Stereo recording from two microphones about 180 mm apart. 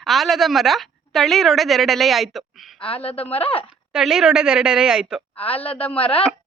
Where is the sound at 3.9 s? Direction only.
5° right (ahead or behind).